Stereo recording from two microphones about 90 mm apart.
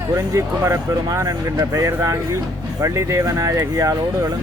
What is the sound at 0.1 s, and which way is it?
Speech, 30° right (ahead or behind).